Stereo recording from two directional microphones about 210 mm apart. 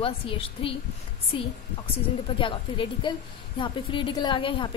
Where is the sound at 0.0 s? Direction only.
25° left (ahead or behind).